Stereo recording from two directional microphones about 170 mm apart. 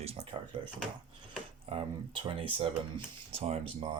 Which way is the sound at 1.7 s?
30° right (ahead or behind).